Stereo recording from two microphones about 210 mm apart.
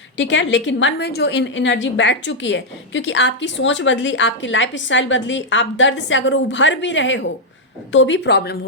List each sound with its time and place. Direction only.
0.2 s a woman's voice: 60° left (ahead or behind)